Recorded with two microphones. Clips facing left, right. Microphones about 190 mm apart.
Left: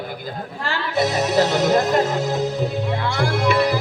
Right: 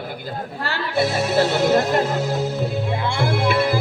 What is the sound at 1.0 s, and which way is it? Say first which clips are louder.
Speech: even; 40° left (ahead or behind).